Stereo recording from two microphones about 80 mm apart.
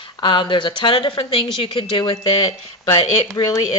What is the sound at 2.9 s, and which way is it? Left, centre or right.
Speech, left.